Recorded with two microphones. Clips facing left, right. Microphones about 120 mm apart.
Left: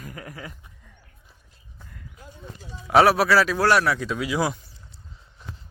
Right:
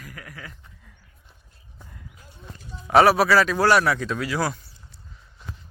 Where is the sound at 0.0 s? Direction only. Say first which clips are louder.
Left 3 dB; 30° left (ahead or behind).